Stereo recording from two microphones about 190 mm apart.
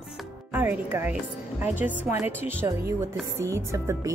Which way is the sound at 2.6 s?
15° right (ahead or behind).